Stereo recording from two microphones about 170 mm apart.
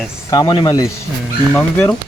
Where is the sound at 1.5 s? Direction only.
10° left (ahead or behind).